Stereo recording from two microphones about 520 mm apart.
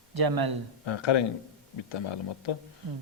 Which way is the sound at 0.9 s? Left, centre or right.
Left.